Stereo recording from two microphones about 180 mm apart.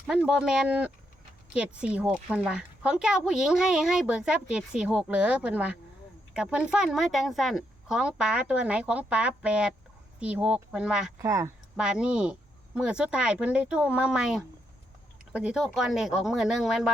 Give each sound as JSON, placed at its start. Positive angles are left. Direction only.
{"t": 0.1, "sound": "speech", "side_deg": -5}
{"t": 11.2, "sound": "speech", "side_deg": -15}
{"t": 11.8, "sound": "speech", "side_deg": -5}